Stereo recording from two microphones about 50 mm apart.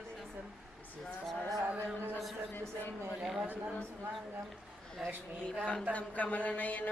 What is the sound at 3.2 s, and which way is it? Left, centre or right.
Speech, centre.